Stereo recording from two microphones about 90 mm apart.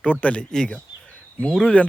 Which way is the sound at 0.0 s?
15° left (ahead or behind).